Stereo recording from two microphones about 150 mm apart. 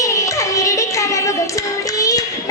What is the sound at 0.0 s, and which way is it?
Music, 20° left (ahead or behind).